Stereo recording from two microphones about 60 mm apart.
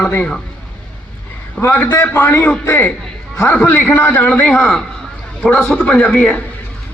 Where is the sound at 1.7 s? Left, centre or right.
Left.